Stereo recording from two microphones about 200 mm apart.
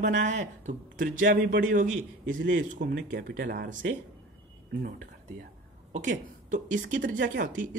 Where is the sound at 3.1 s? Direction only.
50° right (ahead or behind).